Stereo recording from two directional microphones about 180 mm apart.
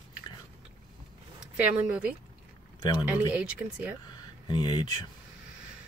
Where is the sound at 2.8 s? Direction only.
25° left (ahead or behind).